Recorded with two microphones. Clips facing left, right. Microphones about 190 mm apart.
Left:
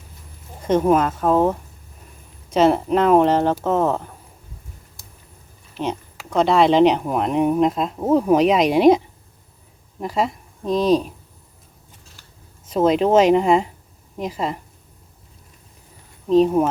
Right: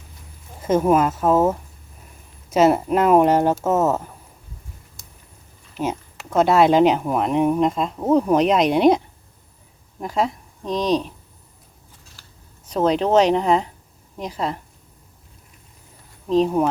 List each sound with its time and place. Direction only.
0.6 s speech: 5° right (ahead or behind)
5.7 s speech: 5° right (ahead or behind)
12.6 s speech: 5° left (ahead or behind)
16.3 s speech: centre (ahead or behind)